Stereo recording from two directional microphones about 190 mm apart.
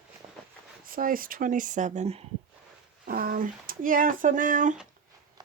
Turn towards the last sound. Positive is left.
turn(degrees=-40)  # may be behind; listen again after turning